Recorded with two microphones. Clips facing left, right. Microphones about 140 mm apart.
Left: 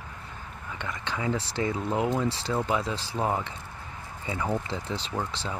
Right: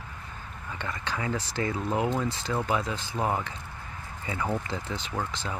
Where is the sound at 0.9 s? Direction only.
20° left (ahead or behind).